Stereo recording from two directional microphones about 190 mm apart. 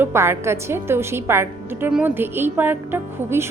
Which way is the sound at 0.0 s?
15° right (ahead or behind).